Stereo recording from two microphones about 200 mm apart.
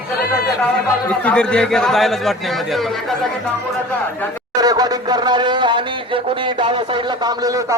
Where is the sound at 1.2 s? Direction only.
5° left (ahead or behind).